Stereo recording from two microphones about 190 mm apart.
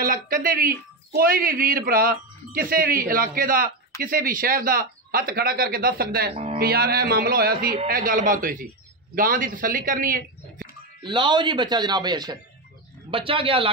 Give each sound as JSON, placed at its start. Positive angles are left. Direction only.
{"t": 0.0, "sound": "speech", "side_deg": -45}
{"t": 6.3, "sound": "speech", "side_deg": -30}
{"t": 6.6, "sound": "speech", "side_deg": -55}
{"t": 10.7, "sound": "a man's voice", "side_deg": -25}